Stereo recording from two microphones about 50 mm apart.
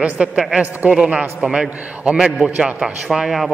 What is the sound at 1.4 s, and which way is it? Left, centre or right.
Speech, right.